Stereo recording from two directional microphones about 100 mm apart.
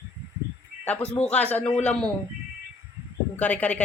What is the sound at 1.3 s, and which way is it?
Speech, 15° left (ahead or behind).